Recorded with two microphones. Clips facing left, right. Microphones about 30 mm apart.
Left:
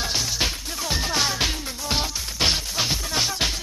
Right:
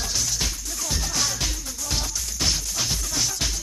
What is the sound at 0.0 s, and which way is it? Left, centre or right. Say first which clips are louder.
Music: left 3 dB; left.